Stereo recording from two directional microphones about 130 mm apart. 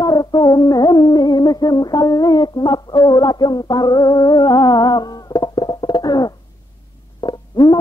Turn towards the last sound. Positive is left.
turn(degrees=35)  # may be behind; listen again after turning